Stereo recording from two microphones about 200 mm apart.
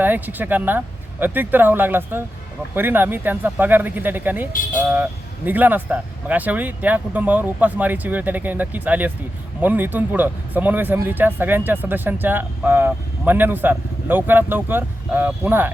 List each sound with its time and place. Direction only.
0.0 s speech: 10° right (ahead or behind)